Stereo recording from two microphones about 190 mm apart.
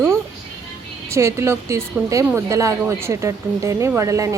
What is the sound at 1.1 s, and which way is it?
A woman's voice, 15° right (ahead or behind).